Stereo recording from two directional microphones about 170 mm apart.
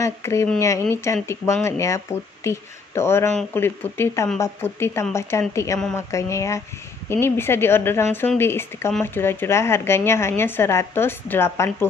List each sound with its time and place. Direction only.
0.0 s a woman's voice: 15° left (ahead or behind)